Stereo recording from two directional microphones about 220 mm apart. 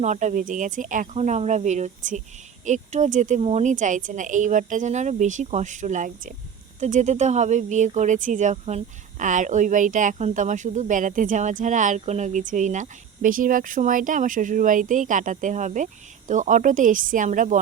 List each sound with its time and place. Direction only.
0.0 s speech: 35° right (ahead or behind)